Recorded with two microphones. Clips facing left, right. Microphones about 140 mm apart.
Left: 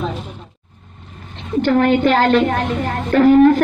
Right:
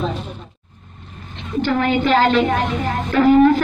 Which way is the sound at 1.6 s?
55° left (ahead or behind).